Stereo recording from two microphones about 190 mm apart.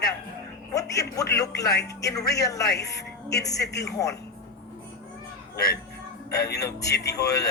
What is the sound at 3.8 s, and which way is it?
Speech, 15° left (ahead or behind).